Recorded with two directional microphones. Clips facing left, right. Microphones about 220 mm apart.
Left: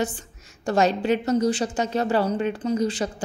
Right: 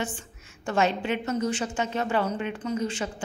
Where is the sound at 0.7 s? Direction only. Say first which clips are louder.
Left 5 dB; 40° left (ahead or behind).